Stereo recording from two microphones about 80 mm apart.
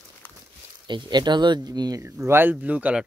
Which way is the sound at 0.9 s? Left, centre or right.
Right.